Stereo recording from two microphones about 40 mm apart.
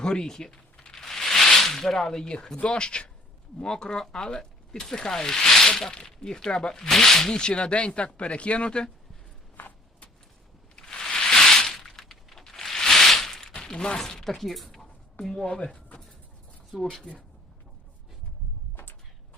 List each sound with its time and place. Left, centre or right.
0.0 s a sound: centre
2.6 s speech: left; by 7.3 s centre
7.3 s speech: left
10.8 s a sound: centre
14.0 s speech: centre
15.4 s speech: left
16.7 s speech: centre